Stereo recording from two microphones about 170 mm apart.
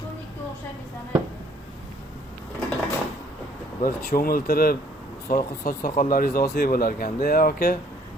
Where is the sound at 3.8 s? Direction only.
60° left (ahead or behind).